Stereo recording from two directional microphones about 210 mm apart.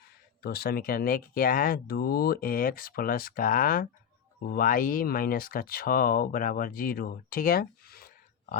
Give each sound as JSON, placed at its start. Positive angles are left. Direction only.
{"t": 0.4, "sound": "speech", "side_deg": 45}